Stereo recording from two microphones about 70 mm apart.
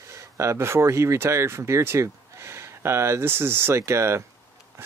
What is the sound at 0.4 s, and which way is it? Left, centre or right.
Speech, right.